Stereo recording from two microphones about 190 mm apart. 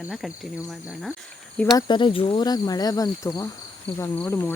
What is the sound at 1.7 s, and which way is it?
Speech, 25° left (ahead or behind).